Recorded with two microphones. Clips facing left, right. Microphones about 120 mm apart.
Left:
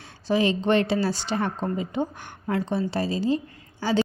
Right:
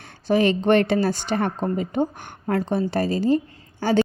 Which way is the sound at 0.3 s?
55° right (ahead or behind).